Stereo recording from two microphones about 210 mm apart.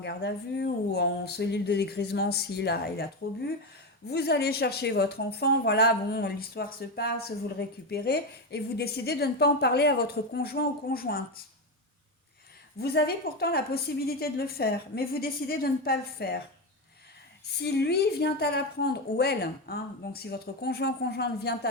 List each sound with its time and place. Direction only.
0.0 s speech: 50° left (ahead or behind)
12.8 s speech: 50° left (ahead or behind)
17.6 s speech: 50° left (ahead or behind)